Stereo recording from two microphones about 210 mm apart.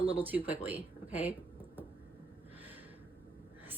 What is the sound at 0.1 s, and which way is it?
Speech, 10° right (ahead or behind).